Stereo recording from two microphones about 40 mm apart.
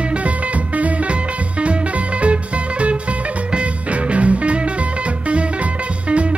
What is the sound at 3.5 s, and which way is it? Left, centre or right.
Music, right.